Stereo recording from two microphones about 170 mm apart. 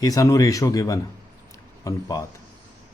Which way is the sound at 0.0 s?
20° left (ahead or behind).